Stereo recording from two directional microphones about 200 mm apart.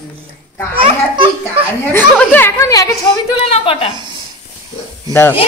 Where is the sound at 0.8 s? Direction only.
25° right (ahead or behind).